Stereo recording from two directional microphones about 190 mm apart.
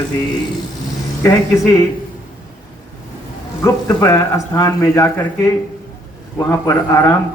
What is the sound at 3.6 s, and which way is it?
A man's voice, 20° left (ahead or behind).